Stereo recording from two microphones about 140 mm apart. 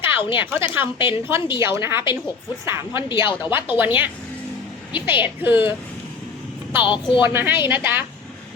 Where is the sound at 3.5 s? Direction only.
15° right (ahead or behind).